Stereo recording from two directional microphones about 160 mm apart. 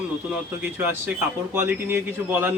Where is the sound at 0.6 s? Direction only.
15° right (ahead or behind).